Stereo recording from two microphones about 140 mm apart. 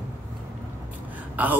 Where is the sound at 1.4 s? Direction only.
10° right (ahead or behind).